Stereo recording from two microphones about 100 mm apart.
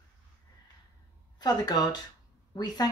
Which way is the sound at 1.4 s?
40° left (ahead or behind).